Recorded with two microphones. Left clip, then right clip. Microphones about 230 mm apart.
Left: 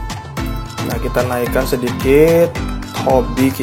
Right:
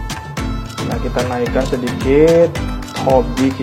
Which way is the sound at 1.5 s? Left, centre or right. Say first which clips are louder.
Left 1 dB; left.